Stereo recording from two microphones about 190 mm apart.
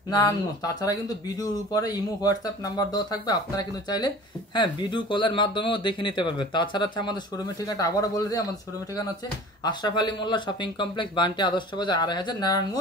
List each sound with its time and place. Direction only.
0.1 s speech: 20° left (ahead or behind)
9.6 s speech: 20° left (ahead or behind)